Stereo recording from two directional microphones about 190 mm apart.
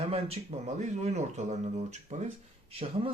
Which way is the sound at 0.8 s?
35° right (ahead or behind).